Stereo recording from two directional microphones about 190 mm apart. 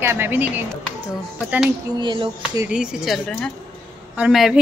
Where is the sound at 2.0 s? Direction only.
25° right (ahead or behind).